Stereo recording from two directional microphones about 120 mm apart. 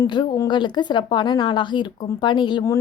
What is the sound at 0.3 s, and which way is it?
A woman's voice, 40° left (ahead or behind).